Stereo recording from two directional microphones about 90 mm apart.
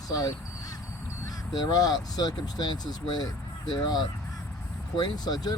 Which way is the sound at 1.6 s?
45° left (ahead or behind).